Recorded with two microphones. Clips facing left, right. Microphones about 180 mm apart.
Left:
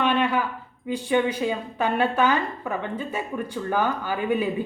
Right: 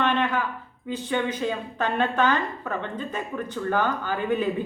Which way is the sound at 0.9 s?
10° left (ahead or behind).